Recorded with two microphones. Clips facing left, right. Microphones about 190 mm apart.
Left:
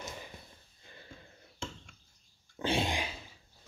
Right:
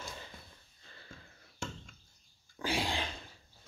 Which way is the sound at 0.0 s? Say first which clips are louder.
Left 2 dB; 15° left (ahead or behind).